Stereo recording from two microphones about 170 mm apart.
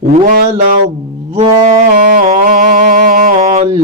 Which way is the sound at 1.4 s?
50° right (ahead or behind).